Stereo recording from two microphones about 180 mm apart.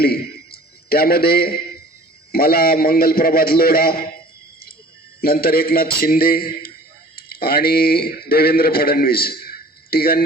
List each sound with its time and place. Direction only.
0.0 s a man's voice: 60° left (ahead or behind)
5.2 s a man's voice: 55° left (ahead or behind)